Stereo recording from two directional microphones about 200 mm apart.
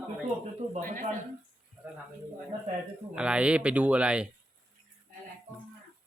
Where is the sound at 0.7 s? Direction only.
45° right (ahead or behind).